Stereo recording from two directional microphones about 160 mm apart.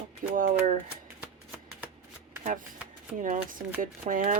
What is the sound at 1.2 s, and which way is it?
Shuffling cards, 10° right (ahead or behind).